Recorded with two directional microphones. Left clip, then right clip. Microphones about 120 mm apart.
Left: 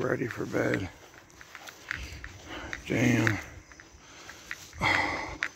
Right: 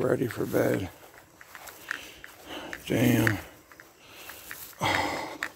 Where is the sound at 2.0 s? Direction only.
25° right (ahead or behind).